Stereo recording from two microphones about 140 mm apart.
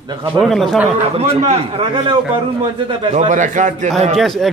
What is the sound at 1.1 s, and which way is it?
Speech, 45° right (ahead or behind).